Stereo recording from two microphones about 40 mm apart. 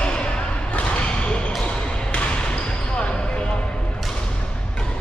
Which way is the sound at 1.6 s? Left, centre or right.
Left.